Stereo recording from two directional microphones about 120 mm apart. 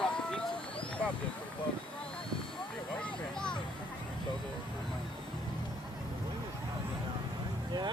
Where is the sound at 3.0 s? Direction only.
5° left (ahead or behind).